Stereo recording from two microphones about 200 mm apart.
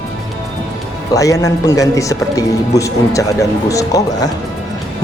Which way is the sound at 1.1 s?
15° left (ahead or behind).